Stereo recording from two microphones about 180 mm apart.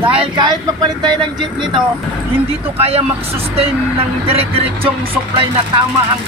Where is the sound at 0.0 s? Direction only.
30° right (ahead or behind).